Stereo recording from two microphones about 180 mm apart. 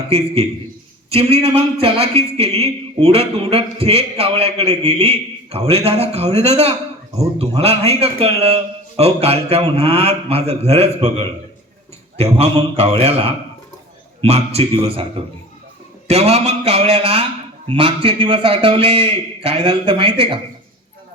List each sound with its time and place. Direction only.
0.1 s a man's voice: 35° right (ahead or behind)